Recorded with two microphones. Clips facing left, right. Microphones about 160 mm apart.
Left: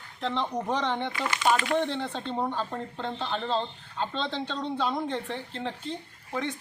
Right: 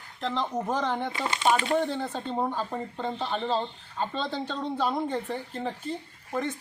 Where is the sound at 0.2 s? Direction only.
Centre (ahead or behind).